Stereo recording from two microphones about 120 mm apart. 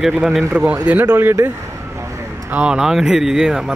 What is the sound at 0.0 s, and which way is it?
Speech, centre (ahead or behind).